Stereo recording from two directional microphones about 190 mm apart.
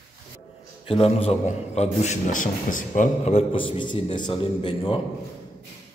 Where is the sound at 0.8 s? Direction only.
30° left (ahead or behind).